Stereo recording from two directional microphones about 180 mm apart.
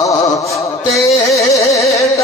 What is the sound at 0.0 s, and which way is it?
Music, 15° left (ahead or behind).